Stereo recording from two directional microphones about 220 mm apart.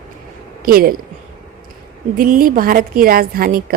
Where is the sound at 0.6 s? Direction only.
40° right (ahead or behind).